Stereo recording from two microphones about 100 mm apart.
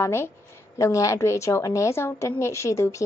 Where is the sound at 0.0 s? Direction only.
25° left (ahead or behind).